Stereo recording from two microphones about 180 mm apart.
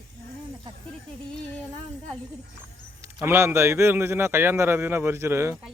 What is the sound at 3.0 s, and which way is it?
A man's voice, 15° right (ahead or behind).